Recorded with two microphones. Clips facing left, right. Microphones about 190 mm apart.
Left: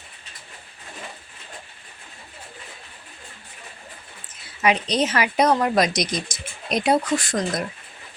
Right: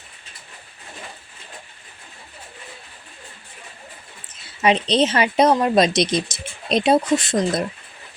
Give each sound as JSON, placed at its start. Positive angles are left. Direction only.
{"t": 4.6, "sound": "speech", "side_deg": -25}